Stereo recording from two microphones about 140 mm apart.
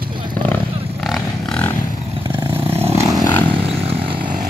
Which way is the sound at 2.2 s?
35° right (ahead or behind).